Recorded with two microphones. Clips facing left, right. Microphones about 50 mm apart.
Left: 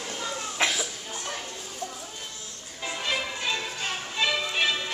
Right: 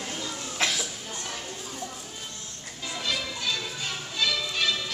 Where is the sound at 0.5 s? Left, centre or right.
Centre.